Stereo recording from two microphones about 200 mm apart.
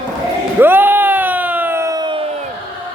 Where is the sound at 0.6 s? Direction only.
10° right (ahead or behind).